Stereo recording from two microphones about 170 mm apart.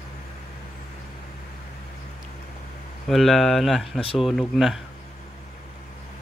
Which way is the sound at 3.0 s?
Centre (ahead or behind).